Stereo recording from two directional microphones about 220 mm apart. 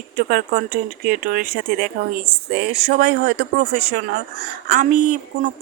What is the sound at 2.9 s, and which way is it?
Speech, 45° right (ahead or behind).